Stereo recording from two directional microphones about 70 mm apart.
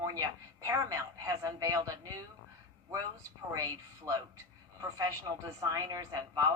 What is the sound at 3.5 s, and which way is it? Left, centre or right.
A woman's voice, right.